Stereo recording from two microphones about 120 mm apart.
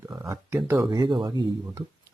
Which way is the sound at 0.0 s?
25° right (ahead or behind).